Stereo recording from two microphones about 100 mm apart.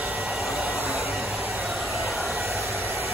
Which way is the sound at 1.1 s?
5° right (ahead or behind).